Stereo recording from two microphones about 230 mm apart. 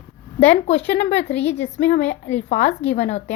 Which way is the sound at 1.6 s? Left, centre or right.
Left.